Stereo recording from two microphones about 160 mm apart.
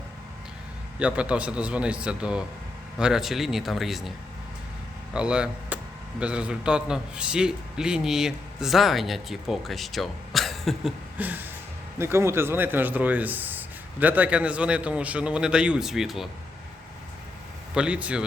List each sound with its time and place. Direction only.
0.9 s speech: 5° right (ahead or behind)
5.1 s speech: 5° right (ahead or behind)
11.2 s speech: 10° right (ahead or behind)
17.7 s speech: 5° right (ahead or behind)